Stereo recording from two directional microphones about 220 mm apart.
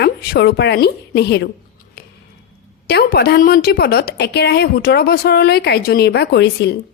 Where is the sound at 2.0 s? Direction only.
45° left (ahead or behind).